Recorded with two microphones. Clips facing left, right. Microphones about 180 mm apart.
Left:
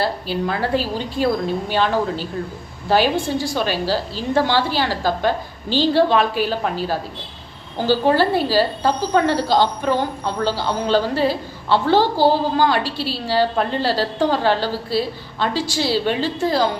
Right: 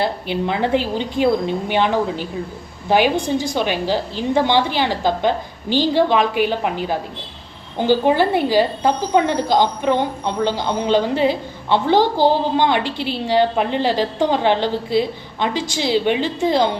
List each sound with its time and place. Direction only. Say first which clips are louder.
0.0 s a woman's voice: right 1 dB; 20° right (ahead or behind)